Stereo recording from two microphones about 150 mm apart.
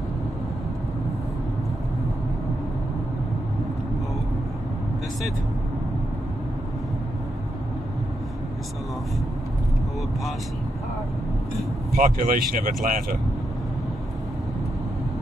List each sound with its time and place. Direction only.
11.9 s speech: 70° right (ahead or behind)